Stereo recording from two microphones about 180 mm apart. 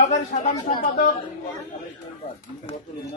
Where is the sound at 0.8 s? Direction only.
50° left (ahead or behind).